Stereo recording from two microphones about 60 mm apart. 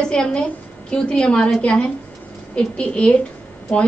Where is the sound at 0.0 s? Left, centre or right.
Centre.